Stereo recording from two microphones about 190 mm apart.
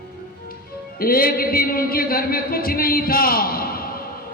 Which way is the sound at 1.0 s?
50° left (ahead or behind).